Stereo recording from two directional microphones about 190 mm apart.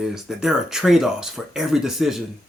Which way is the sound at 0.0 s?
Centre (ahead or behind).